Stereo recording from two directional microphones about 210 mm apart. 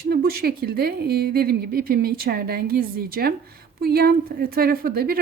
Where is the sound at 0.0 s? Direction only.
45° right (ahead or behind).